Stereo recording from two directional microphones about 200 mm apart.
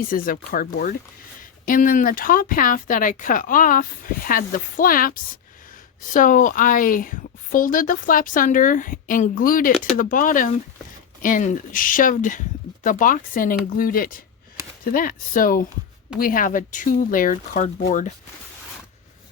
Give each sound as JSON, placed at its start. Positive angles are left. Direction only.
{"t": 0.1, "sound": "speech", "side_deg": 45}